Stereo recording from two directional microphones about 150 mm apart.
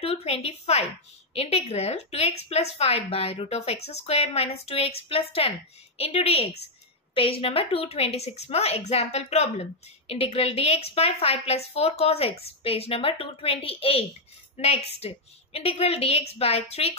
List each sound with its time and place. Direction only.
0.0 s a woman's voice: 45° left (ahead or behind)